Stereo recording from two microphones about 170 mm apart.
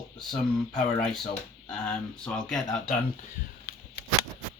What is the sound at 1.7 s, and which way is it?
Speech, 5° left (ahead or behind).